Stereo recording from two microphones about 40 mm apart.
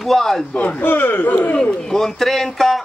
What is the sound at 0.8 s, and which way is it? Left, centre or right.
Speech, left.